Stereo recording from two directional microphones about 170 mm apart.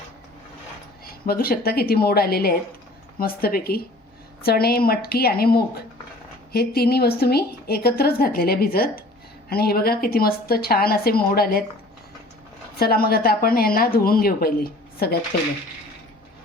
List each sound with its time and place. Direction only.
1.3 s a woman's voice: 65° left (ahead or behind)
12.7 s a woman's voice: 65° left (ahead or behind)